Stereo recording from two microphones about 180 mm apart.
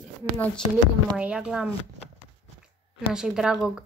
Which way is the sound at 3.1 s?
5° right (ahead or behind).